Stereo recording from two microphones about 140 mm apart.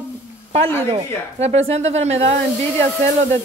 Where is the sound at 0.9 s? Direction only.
45° right (ahead or behind).